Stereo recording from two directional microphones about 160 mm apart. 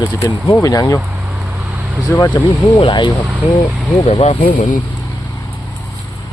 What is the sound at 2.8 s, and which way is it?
Speech, 30° left (ahead or behind).